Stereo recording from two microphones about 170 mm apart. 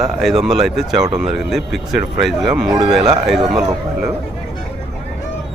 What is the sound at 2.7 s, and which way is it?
Speech, 30° right (ahead or behind).